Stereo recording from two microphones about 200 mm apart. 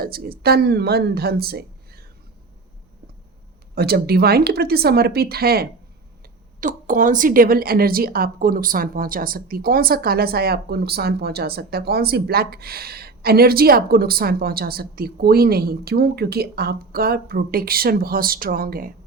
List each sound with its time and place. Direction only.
0.0 s speech: 50° right (ahead or behind)
3.8 s a woman's voice: 50° right (ahead or behind)